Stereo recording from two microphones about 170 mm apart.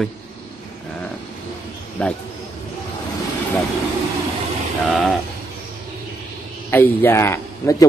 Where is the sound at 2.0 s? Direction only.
5° left (ahead or behind).